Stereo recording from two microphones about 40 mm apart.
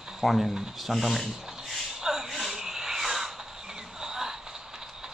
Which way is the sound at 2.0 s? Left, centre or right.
Centre.